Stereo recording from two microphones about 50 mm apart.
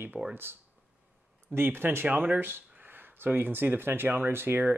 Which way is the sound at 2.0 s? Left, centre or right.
Right.